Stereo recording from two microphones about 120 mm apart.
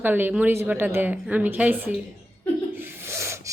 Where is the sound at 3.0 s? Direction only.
20° right (ahead or behind).